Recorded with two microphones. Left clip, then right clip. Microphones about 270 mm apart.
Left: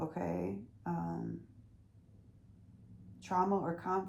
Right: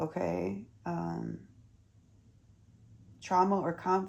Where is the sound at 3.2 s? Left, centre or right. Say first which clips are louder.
Right 5 dB; right.